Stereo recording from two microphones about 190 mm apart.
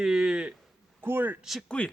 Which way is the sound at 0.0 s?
5° right (ahead or behind).